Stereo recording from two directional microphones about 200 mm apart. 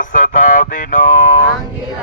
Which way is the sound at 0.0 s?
40° left (ahead or behind).